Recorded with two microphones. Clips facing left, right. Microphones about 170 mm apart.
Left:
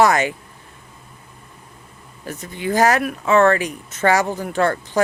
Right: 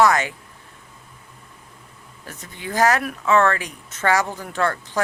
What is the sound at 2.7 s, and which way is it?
Speech, 15° left (ahead or behind).